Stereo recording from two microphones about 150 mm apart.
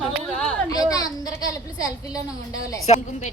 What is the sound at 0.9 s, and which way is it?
A child's voice, 25° left (ahead or behind).